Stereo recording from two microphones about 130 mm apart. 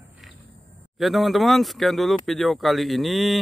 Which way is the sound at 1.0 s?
Centre (ahead or behind).